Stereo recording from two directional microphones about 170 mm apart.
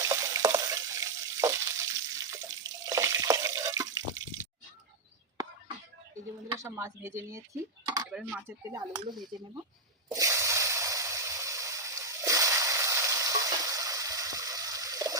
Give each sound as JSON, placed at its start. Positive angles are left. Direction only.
{"t": 0.0, "sound": "water", "side_deg": -20}
{"t": 6.6, "sound": "speech", "side_deg": -15}
{"t": 10.1, "sound": "a sound", "side_deg": -20}